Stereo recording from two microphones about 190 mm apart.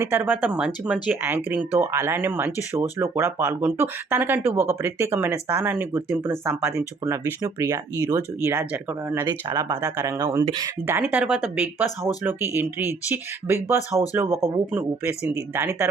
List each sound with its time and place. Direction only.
0.0 s speech: 10° right (ahead or behind)